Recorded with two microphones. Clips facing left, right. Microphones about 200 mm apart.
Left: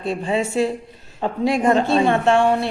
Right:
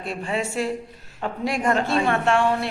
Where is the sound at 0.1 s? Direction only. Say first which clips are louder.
Left 5 dB; 25° left (ahead or behind).